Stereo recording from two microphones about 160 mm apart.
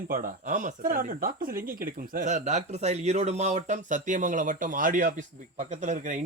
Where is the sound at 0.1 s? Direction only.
60° right (ahead or behind).